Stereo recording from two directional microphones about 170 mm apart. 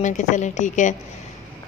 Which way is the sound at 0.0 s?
45° left (ahead or behind).